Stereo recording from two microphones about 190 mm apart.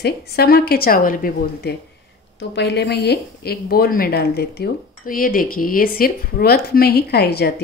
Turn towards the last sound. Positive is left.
turn(degrees=55)  # may be behind; listen again after turning